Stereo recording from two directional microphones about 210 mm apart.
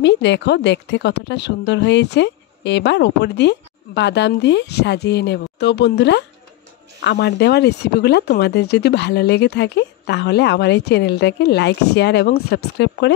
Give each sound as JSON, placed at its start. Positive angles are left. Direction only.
{"t": 0.0, "sound": "a woman's voice", "side_deg": 55}